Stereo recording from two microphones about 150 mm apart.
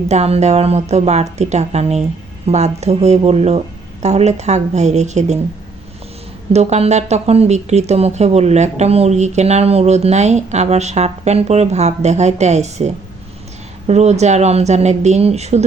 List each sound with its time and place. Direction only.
0.1 s speech: 45° right (ahead or behind)
6.5 s speech: 45° right (ahead or behind)